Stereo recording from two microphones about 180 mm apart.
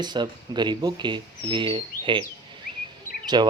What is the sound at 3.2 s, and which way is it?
Speech, 25° right (ahead or behind).